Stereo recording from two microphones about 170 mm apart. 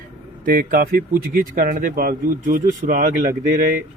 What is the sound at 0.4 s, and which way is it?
Speech, 55° right (ahead or behind).